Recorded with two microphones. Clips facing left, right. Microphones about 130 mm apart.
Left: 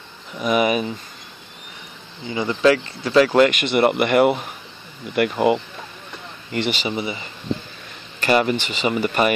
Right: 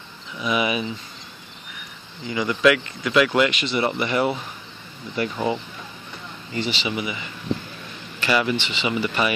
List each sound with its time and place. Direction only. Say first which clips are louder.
0.4 s speech: left 4 dB; 45° left (ahead or behind)
2.2 s speech: left 2 dB; 30° left (ahead or behind); by 6.8 s 65° left (ahead or behind)
6.8 s speech: left 2 dB; 35° left (ahead or behind)